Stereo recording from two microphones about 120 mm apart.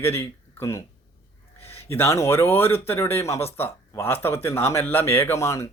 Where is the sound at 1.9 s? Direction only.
20° left (ahead or behind).